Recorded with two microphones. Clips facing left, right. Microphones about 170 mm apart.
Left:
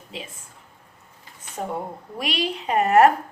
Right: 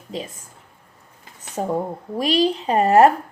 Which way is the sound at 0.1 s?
40° right (ahead or behind).